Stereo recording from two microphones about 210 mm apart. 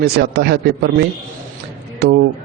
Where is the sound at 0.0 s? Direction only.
50° right (ahead or behind).